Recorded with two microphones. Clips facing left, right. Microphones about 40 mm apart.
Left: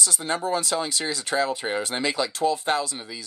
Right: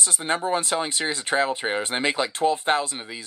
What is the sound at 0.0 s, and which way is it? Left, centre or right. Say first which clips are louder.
Speech: right 1 dB; right.